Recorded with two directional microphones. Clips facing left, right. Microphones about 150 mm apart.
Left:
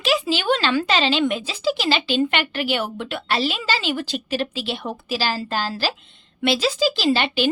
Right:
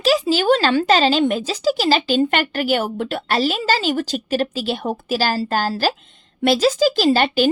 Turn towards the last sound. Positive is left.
turn(degrees=-45)  # may be behind; listen again after turning